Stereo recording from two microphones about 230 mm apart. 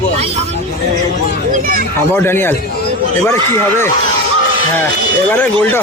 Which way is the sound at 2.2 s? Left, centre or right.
Centre.